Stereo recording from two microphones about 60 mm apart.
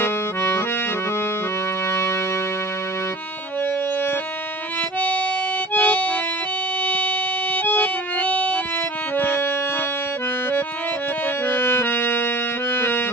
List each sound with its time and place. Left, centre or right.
0.0 s accordion: left
1.9 s music: left
4.9 s music: left
11.4 s music: left